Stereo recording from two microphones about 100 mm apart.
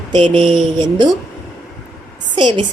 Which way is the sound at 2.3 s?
50° right (ahead or behind).